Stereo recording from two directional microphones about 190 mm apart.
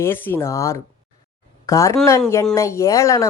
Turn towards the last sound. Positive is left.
turn(degrees=15)  # may be behind; listen again after turning